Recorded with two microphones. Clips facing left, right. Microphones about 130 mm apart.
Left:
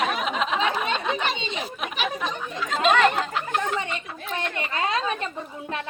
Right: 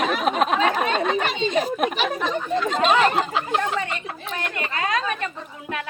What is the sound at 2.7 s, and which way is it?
Speech, centre (ahead or behind).